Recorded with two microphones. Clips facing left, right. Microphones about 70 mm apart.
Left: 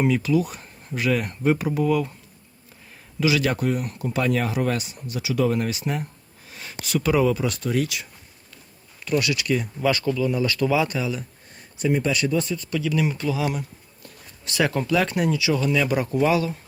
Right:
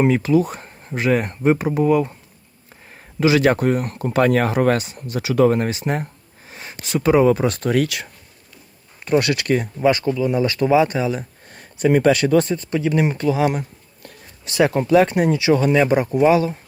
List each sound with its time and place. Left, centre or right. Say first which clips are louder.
0.0 s speech: right 5 dB; right
7.3 s speech: right 6 dB; right
7.7 s speech: right 5 dB; right
9.1 s speech: right 5 dB; right
9.8 s speech: right 4 dB; right
11.5 s speech: right 6 dB; right
12.5 s speech: right 5 dB; right
14.4 s speech: right 5 dB; right